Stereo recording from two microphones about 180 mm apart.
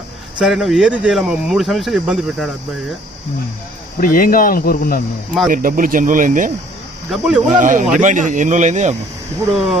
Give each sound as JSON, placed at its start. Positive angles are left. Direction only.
{"t": 0.3, "sound": "speech", "side_deg": -5}
{"t": 4.0, "sound": "speech", "side_deg": 50}
{"t": 5.5, "sound": "speech", "side_deg": -50}
{"t": 7.1, "sound": "speech", "side_deg": -5}
{"t": 7.5, "sound": "speech", "side_deg": -45}